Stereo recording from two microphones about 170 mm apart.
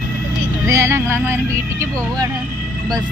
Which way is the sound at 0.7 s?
15° right (ahead or behind).